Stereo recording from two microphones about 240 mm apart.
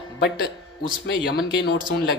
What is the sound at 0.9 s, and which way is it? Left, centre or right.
Speech, left.